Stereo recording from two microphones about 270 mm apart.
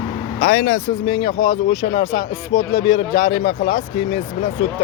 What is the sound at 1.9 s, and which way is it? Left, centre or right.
Speech, left.